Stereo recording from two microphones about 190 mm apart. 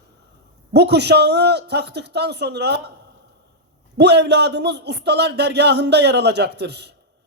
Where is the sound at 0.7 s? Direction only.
60° right (ahead or behind).